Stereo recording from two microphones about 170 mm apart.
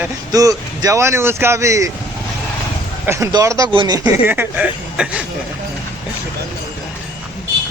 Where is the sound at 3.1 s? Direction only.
15° right (ahead or behind).